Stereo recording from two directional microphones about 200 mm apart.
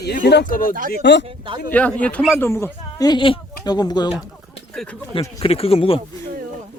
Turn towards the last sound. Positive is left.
turn(degrees=30)  # may be behind; listen again after turning